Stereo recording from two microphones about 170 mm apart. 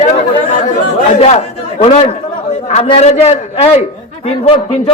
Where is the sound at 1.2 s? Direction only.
40° left (ahead or behind).